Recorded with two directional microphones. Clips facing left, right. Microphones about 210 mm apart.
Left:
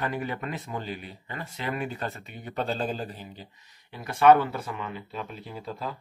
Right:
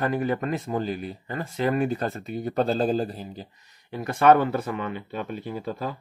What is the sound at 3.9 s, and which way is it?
Speech, 50° right (ahead or behind).